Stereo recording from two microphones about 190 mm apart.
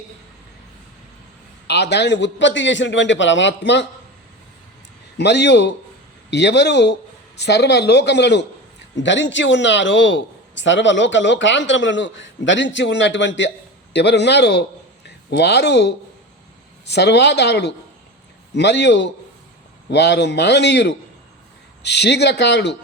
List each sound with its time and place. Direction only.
1.6 s a man's voice: 65° left (ahead or behind)
5.1 s a woman's voice: 65° left (ahead or behind)